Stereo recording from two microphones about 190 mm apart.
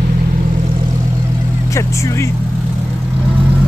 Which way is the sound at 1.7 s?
15° left (ahead or behind).